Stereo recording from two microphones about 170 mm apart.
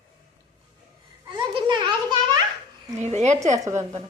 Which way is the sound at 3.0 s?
40° right (ahead or behind).